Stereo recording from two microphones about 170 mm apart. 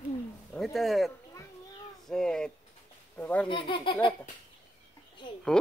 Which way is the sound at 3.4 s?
30° left (ahead or behind).